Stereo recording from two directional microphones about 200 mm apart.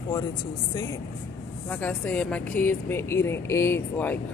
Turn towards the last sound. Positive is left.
turn(degrees=10)  # may be behind; listen again after turning